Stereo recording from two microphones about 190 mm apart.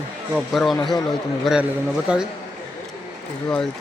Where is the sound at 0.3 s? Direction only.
Centre (ahead or behind).